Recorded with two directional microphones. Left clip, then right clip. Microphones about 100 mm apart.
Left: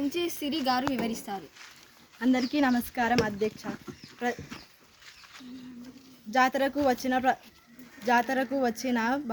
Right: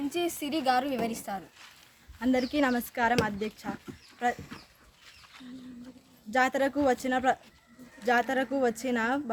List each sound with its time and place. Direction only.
0.1 s a woman's voice: 45° right (ahead or behind)
1.1 s a woman's voice: 70° right (ahead or behind)
2.3 s a woman's voice: 45° right (ahead or behind); by 3.7 s 60° right (ahead or behind)
6.3 s speech: 30° right (ahead or behind)